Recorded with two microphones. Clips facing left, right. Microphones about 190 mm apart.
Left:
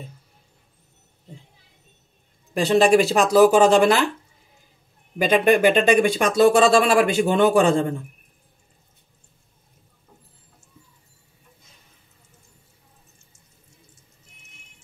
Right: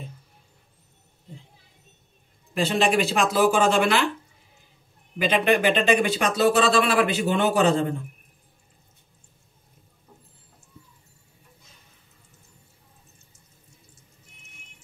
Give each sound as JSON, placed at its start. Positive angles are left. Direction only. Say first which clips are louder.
{"t": 2.8, "sound": "speech", "louder": "left 6 dB", "side_deg": 40}
{"t": 5.2, "sound": "speech", "louder": "left 4 dB", "side_deg": 45}